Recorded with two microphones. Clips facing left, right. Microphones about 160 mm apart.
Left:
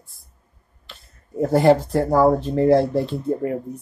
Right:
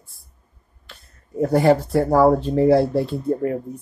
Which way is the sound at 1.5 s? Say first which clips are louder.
Left 1 dB; centre (ahead or behind).